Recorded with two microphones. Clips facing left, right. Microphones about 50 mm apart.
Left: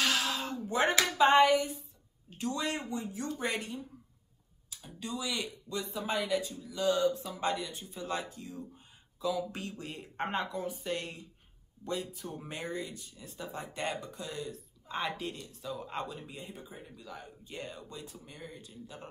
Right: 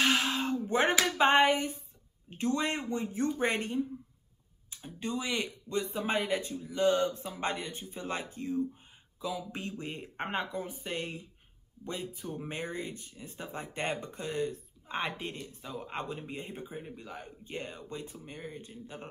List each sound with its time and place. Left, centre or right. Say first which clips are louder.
0.0 s a sound: right 3 dB; right
1.0 s speech: left 3 dB; right
9.2 s speech: left 3 dB; right